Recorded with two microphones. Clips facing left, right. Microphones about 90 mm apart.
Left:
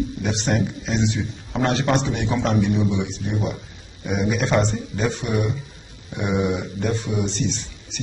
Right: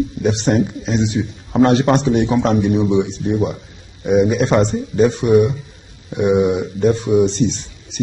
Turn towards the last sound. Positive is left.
turn(degrees=-20)  # may be behind; listen again after turning